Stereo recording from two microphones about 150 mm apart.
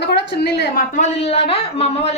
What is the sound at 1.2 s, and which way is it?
Speech, 40° left (ahead or behind).